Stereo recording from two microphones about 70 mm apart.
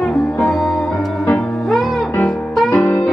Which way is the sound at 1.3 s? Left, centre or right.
Centre.